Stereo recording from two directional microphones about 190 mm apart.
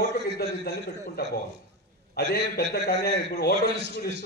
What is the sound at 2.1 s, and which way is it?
A man's voice, 55° left (ahead or behind).